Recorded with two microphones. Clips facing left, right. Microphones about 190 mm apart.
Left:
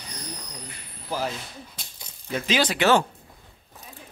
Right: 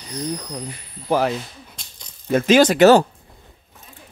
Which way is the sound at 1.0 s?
65° right (ahead or behind).